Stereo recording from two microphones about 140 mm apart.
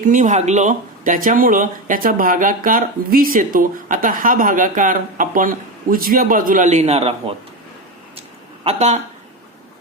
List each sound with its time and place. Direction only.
0.0 s speech: 65° right (ahead or behind); by 7.3 s 45° right (ahead or behind)
8.6 s a woman's voice: 55° right (ahead or behind)